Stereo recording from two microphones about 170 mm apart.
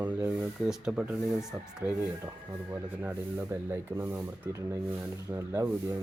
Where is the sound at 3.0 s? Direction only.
15° right (ahead or behind).